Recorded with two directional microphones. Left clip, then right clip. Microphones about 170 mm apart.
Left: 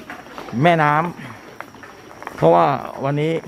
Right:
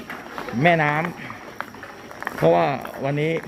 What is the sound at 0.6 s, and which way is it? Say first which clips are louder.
Speech: left 3 dB; 35° left (ahead or behind).